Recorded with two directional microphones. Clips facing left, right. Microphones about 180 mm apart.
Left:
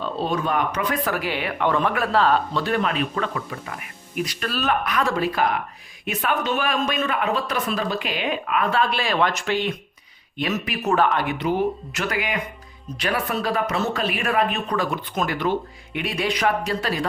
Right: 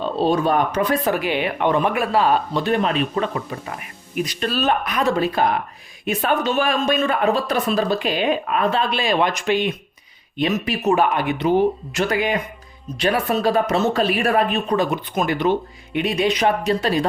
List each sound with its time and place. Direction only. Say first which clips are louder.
0.0 s a man's voice: right 6 dB; 30° right (ahead or behind)
1.1 s a man's voice: right 4 dB; 20° right (ahead or behind)
8.8 s speech: right 2 dB; 20° right (ahead or behind)